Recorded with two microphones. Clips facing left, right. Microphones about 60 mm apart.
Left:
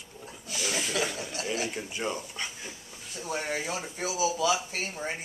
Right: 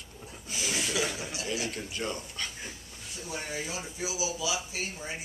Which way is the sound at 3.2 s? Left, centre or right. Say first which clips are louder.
Left 5 dB; left.